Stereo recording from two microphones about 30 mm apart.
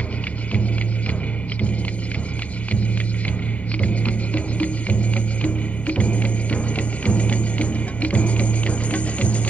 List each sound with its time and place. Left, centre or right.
3.8 s music: left